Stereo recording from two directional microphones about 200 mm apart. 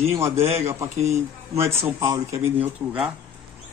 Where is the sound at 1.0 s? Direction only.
35° right (ahead or behind).